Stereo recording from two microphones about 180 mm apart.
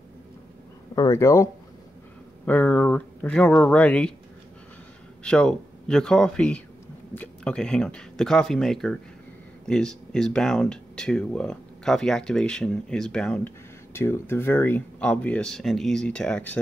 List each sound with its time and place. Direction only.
0.9 s speech: 15° left (ahead or behind)
5.2 s speech: 5° left (ahead or behind)